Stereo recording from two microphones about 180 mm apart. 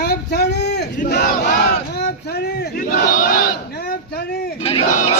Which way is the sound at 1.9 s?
65° left (ahead or behind).